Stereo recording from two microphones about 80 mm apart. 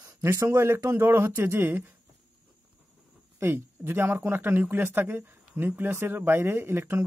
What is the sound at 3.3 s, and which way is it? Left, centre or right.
Speech, right.